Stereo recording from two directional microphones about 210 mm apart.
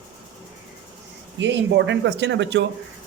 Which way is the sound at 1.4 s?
60° right (ahead or behind).